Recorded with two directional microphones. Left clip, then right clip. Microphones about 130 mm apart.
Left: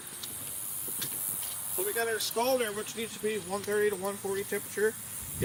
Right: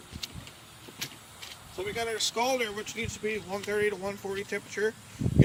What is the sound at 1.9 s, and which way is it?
Speech, 40° right (ahead or behind).